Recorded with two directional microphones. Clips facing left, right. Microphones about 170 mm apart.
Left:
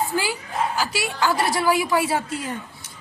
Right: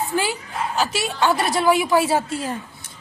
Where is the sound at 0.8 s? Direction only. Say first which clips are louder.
Right 2 dB; 25° right (ahead or behind).